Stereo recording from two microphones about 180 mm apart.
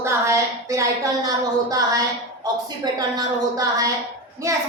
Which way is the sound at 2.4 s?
20° right (ahead or behind).